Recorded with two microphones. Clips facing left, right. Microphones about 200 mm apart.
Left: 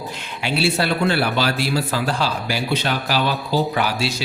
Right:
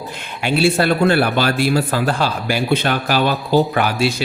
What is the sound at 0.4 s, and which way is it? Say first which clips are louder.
A man's voice: right 5 dB; 50° right (ahead or behind).